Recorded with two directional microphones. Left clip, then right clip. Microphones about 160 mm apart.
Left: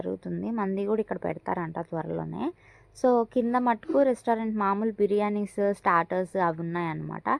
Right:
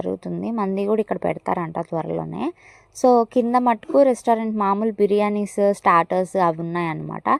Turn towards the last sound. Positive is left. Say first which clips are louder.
# right 7 dB
turn(degrees=-45)  # may be behind; listen again after turning